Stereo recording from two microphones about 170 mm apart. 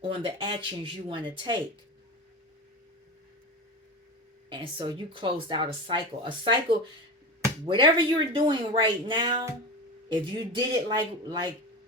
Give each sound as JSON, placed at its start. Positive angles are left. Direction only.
{"t": 0.1, "sound": "speech", "side_deg": -30}
{"t": 4.4, "sound": "speech", "side_deg": -30}